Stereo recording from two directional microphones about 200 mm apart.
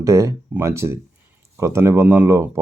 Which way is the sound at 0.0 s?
15° right (ahead or behind).